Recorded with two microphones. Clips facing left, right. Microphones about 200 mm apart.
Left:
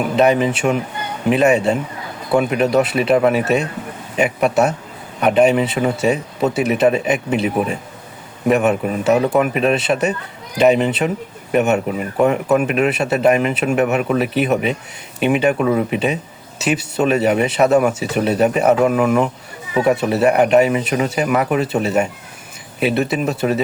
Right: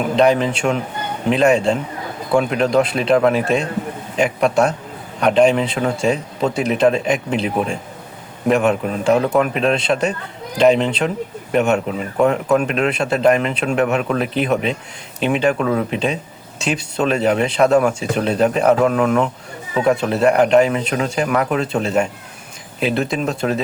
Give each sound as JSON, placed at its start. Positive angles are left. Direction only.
{"t": 0.2, "sound": "a man's voice", "side_deg": 5}